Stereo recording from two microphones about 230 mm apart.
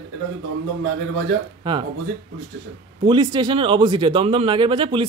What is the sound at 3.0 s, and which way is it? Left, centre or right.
A man's voice, centre.